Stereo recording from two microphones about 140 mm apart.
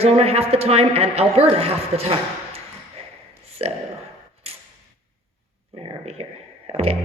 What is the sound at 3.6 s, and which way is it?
Speech, 45° right (ahead or behind).